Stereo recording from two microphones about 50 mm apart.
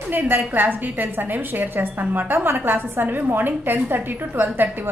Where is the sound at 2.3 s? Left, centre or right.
Right.